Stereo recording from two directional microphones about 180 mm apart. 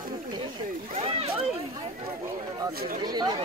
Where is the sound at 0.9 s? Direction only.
35° right (ahead or behind).